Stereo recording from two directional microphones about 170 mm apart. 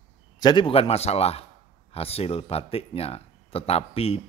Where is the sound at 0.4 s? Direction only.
25° left (ahead or behind).